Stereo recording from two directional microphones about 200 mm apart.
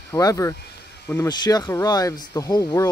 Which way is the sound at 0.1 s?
15° left (ahead or behind).